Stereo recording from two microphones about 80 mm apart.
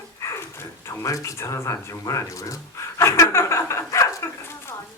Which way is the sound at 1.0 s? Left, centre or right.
Left.